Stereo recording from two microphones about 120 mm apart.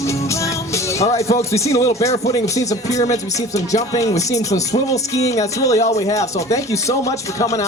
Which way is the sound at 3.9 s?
30° left (ahead or behind).